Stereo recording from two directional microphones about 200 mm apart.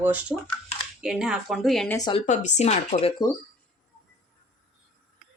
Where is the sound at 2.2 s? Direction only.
35° left (ahead or behind).